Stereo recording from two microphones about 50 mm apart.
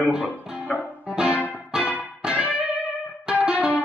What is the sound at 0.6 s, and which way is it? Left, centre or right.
Music, right.